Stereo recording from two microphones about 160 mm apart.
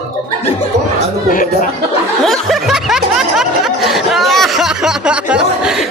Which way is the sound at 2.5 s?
Centre (ahead or behind).